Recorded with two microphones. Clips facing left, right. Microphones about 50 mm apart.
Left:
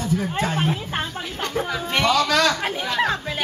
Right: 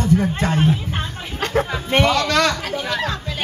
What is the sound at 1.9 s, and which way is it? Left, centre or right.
Speech, right.